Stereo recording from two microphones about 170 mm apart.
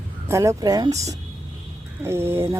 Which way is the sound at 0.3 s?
15° right (ahead or behind).